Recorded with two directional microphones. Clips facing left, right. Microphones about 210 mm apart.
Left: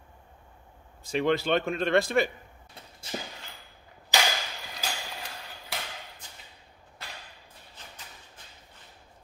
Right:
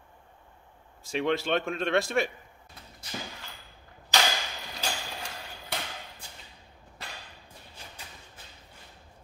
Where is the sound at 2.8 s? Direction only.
30° left (ahead or behind).